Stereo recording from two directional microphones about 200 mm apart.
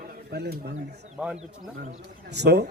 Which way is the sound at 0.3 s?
55° right (ahead or behind).